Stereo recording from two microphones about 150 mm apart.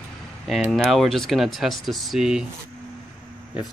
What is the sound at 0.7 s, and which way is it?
Speech, centre (ahead or behind).